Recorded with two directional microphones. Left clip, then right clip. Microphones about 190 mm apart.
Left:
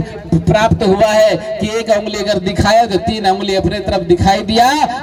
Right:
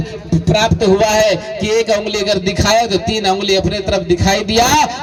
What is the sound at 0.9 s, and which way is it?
Speech, 35° left (ahead or behind).